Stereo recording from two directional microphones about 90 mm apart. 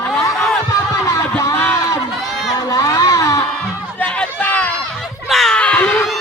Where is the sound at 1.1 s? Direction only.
35° left (ahead or behind).